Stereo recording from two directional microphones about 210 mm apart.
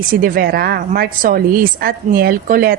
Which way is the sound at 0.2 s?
45° right (ahead or behind).